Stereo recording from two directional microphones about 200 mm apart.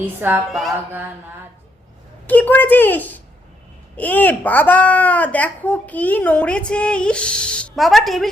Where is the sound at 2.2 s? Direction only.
10° left (ahead or behind).